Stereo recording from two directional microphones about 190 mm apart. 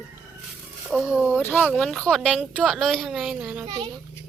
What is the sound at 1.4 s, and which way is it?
Speech, 10° left (ahead or behind).